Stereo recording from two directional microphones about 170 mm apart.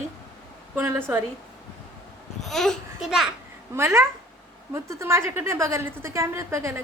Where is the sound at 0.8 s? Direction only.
15° right (ahead or behind).